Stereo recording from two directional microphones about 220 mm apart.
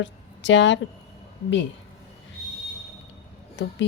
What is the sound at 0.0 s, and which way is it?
Speech, 55° left (ahead or behind).